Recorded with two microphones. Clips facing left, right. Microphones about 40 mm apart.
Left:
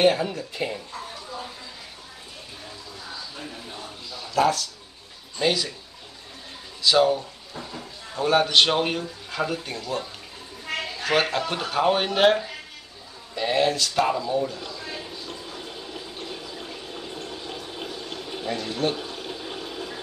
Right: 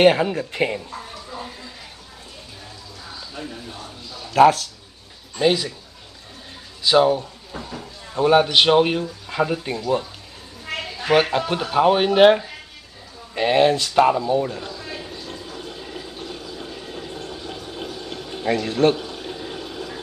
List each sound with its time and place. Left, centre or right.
0.0 s speech: right
4.3 s speech: right
5.4 s speech: centre
6.8 s speech: centre
13.3 s speech: right
14.6 s a sound: centre
15.4 s fill: centre
15.8 s water: centre
16.2 s water: centre
18.4 s a man's voice: right
18.9 s a sound: centre